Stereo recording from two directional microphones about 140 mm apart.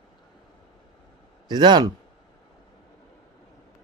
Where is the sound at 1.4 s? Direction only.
30° right (ahead or behind).